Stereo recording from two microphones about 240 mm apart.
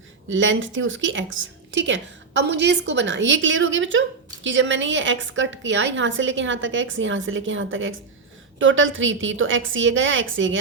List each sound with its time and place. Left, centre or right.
0.3 s a woman's voice: right